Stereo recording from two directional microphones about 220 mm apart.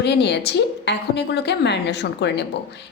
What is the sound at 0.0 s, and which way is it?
Speech, 50° left (ahead or behind).